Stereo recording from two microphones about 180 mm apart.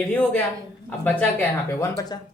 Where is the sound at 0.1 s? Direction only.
10° left (ahead or behind).